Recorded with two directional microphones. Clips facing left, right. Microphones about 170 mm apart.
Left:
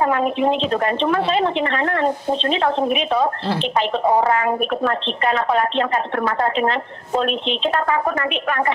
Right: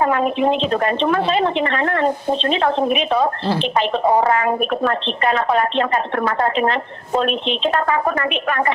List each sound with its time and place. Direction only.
0.0 s speech: 70° right (ahead or behind)